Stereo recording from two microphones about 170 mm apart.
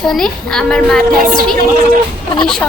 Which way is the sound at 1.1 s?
55° right (ahead or behind).